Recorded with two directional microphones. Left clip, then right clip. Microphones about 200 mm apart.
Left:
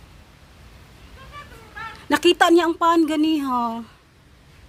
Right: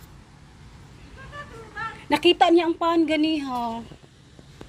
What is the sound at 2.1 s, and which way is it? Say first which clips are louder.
A woman's voice: left 2 dB; 35° left (ahead or behind).